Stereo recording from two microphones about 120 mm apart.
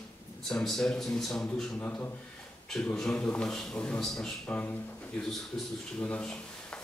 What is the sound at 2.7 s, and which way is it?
A man's voice, 5° left (ahead or behind).